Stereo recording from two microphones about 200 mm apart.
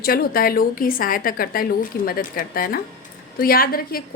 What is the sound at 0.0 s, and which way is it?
A woman's voice, 50° left (ahead or behind).